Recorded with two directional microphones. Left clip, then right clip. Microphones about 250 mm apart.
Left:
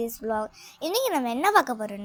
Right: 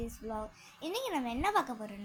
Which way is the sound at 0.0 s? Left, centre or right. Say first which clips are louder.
Left 12 dB; left.